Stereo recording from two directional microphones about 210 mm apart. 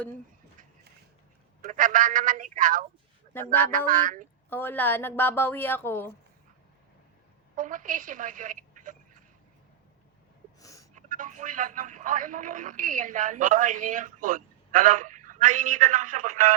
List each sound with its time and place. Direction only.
1.6 s speech: 40° right (ahead or behind)
4.4 s a woman's voice: 10° left (ahead or behind)
7.5 s a woman's voice: 40° right (ahead or behind)
10.6 s a sound: 15° left (ahead or behind)
10.9 s speech: 40° right (ahead or behind)